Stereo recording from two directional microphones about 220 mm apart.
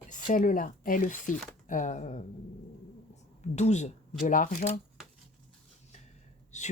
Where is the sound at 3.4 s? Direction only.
30° left (ahead or behind).